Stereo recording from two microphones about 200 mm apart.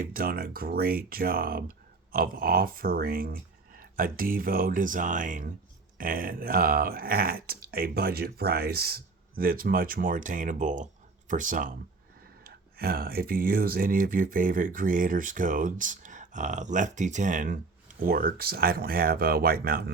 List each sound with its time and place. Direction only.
0.0 s speech: 45° right (ahead or behind)